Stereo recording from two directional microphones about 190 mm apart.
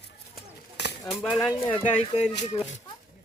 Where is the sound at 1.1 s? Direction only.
Centre (ahead or behind).